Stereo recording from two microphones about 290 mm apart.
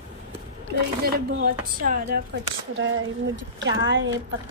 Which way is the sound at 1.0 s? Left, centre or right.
Right.